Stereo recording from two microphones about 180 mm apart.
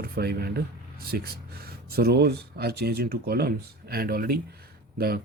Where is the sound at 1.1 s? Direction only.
60° right (ahead or behind).